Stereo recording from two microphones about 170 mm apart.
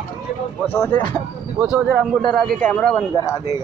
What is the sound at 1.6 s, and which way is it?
Speech, 5° right (ahead or behind).